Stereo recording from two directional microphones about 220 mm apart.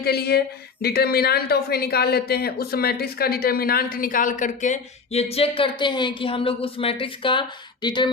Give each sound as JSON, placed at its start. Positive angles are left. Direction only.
{"t": 0.0, "sound": "a woman's voice", "side_deg": 45}